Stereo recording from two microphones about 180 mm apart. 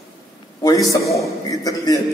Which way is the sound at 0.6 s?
20° left (ahead or behind).